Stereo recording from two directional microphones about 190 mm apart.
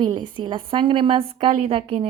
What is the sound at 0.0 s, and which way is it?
A woman's voice, 25° right (ahead or behind).